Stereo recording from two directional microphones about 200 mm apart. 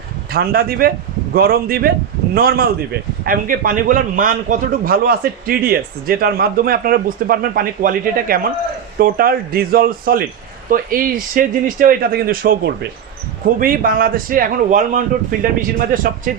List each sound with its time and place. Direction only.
0.3 s a man's voice: 50° right (ahead or behind)